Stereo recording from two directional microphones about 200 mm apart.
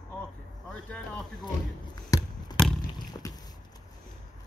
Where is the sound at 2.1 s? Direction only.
15° left (ahead or behind).